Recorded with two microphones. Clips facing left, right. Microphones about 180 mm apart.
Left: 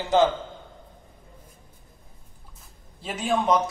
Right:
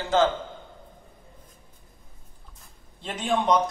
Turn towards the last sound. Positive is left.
turn(degrees=5)  # may be behind; listen again after turning